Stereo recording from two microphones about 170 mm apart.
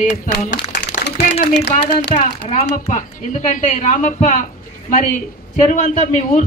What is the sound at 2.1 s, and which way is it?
A woman's voice, 40° left (ahead or behind).